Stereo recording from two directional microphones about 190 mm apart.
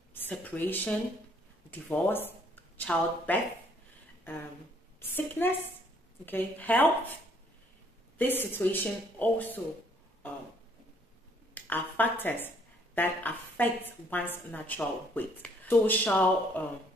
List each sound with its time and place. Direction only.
0.1 s a woman's voice: 10° left (ahead or behind)
5.0 s a woman's voice: 10° left (ahead or behind)
8.2 s a woman's voice: 10° left (ahead or behind)
11.5 s a woman's voice: 10° left (ahead or behind)